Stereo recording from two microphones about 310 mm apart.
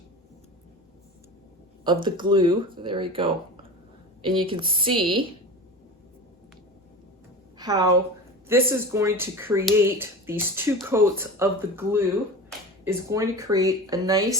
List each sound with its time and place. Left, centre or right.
1.8 s speech: centre
7.6 s a woman's voice: centre